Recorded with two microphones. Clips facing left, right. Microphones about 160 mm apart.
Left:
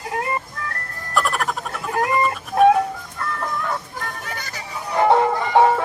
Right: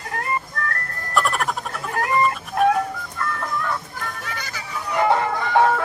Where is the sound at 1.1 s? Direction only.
Centre (ahead or behind).